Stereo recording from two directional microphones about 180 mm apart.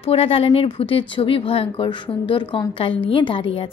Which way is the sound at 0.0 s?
35° left (ahead or behind).